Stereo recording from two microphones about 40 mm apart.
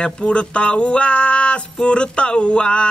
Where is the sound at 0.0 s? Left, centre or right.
Left.